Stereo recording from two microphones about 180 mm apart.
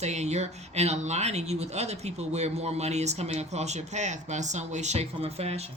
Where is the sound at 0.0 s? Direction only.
40° right (ahead or behind).